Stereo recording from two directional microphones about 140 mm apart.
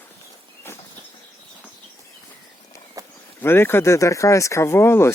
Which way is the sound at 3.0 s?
25° right (ahead or behind).